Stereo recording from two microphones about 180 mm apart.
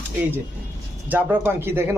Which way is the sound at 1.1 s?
10° right (ahead or behind).